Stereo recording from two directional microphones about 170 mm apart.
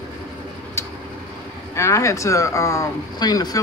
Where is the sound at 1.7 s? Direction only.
15° left (ahead or behind).